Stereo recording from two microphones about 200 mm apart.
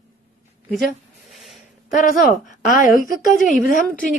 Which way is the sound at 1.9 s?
40° left (ahead or behind).